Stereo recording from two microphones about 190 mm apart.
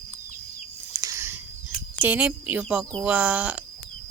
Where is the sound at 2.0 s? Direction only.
5° right (ahead or behind).